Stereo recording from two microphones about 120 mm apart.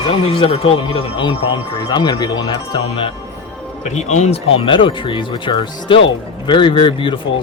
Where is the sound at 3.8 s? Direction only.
70° left (ahead or behind).